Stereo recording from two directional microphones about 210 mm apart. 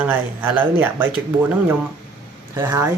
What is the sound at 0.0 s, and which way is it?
Speech, 10° right (ahead or behind).